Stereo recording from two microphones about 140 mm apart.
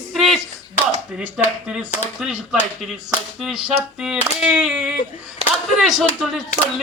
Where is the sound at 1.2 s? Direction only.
10° right (ahead or behind).